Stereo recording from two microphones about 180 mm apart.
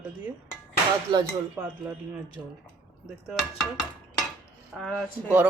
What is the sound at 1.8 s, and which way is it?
Speech, 10° right (ahead or behind).